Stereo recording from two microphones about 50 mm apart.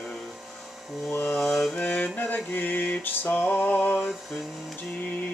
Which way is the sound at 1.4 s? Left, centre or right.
Centre.